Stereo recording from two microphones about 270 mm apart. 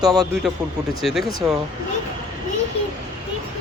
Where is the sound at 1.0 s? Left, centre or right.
Centre.